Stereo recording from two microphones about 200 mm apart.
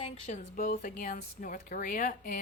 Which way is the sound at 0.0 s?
30° left (ahead or behind).